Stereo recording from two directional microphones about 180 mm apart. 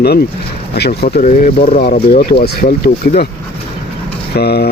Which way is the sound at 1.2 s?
45° left (ahead or behind).